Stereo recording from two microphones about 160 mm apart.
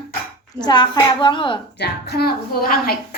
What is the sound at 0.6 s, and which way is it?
Speech, 25° left (ahead or behind).